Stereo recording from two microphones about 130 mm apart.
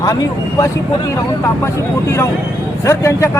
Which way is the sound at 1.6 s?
20° left (ahead or behind).